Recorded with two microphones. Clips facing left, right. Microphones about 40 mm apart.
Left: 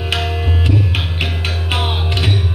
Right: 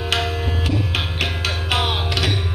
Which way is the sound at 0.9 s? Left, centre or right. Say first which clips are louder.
Left 1 dB; centre.